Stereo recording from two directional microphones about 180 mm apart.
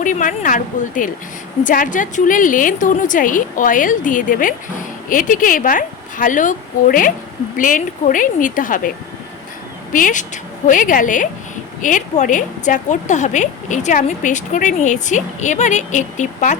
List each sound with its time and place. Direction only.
0.0 s a woman's voice: 45° left (ahead or behind)
9.9 s a woman's voice: 45° left (ahead or behind)